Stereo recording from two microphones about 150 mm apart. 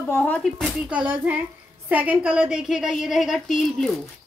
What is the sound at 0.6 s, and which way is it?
A woman's voice, 5° right (ahead or behind).